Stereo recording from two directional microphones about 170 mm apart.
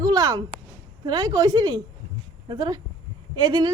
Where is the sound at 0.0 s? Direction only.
25° right (ahead or behind).